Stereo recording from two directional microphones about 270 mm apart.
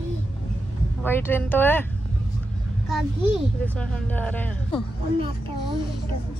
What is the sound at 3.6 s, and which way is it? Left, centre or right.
Speech, centre.